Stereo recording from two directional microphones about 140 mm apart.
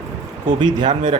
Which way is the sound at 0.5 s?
35° right (ahead or behind).